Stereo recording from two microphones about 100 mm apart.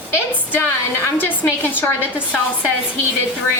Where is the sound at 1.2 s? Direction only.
20° left (ahead or behind).